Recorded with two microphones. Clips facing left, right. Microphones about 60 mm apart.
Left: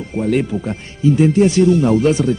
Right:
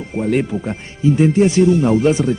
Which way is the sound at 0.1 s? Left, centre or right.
Centre.